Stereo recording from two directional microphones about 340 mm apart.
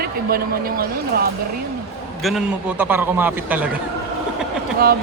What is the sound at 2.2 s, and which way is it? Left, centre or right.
A man's voice, centre.